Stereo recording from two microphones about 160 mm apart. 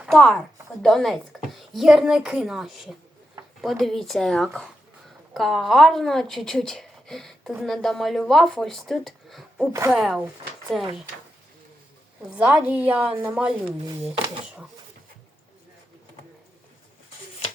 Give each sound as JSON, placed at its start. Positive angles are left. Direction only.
{"t": 0.0, "sound": "speech", "side_deg": 5}
{"t": 12.2, "sound": "a woman's voice", "side_deg": -5}
{"t": 13.7, "sound": "speech", "side_deg": -25}